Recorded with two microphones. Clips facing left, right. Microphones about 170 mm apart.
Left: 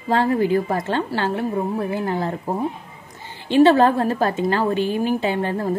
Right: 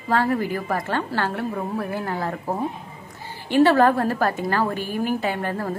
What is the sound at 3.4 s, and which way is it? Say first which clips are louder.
A woman's voice: left 2 dB; 20° left (ahead or behind).